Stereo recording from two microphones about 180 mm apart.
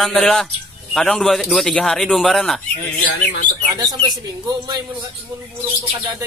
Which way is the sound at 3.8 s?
25° right (ahead or behind).